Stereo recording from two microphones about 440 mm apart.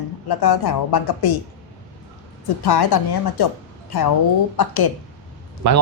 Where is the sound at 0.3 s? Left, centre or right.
Left.